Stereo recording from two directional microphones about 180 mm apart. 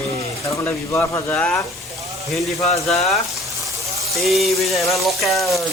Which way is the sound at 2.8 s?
Centre (ahead or behind).